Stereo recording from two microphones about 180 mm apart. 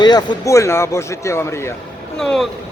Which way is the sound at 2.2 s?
Centre (ahead or behind).